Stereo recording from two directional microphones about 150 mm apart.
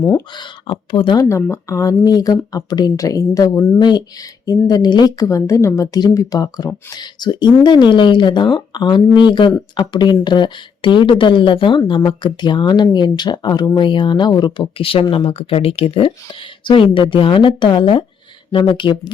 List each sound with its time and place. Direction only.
0.3 s speech: 30° left (ahead or behind)
1.5 s speech: 20° left (ahead or behind)
3.8 s speech: 30° left (ahead or behind)